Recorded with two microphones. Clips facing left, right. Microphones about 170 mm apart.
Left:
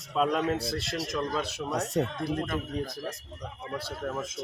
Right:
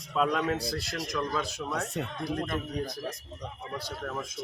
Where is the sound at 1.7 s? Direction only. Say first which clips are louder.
Left 6 dB; 40° left (ahead or behind).